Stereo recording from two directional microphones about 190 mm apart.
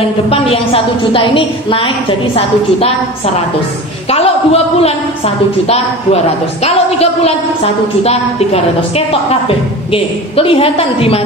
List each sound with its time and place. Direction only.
0.3 s a woman's voice: 30° left (ahead or behind)
4.1 s a woman's voice: 30° left (ahead or behind)